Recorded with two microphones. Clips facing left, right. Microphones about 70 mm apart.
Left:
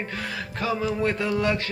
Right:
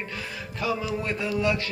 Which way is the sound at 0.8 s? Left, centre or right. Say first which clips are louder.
Left 4 dB; left.